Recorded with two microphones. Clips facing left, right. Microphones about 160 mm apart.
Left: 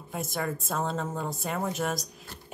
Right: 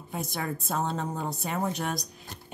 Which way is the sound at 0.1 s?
Centre (ahead or behind).